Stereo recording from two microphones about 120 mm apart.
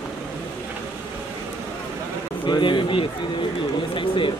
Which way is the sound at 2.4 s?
40° left (ahead or behind).